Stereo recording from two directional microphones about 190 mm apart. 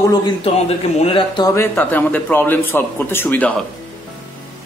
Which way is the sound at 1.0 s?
30° left (ahead or behind).